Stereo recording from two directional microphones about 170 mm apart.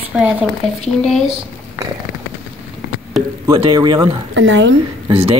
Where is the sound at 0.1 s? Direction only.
5° right (ahead or behind).